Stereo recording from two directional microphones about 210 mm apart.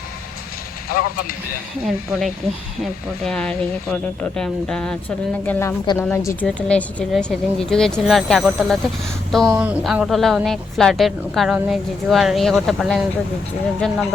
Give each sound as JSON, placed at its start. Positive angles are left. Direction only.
{"t": 0.9, "sound": "speech", "side_deg": 45}
{"t": 2.8, "sound": "a woman's voice", "side_deg": 5}